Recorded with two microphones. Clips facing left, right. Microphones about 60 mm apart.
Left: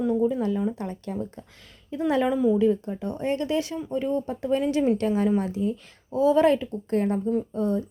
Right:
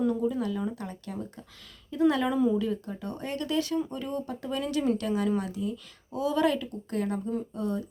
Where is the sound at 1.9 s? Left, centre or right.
Left.